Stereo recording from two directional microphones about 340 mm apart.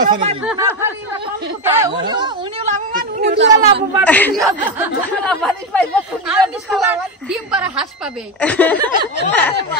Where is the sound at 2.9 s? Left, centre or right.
Right.